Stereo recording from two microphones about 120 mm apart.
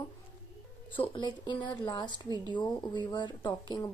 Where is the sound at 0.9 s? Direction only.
40° left (ahead or behind).